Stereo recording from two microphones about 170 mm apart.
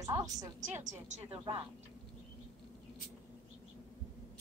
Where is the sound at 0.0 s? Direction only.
20° right (ahead or behind).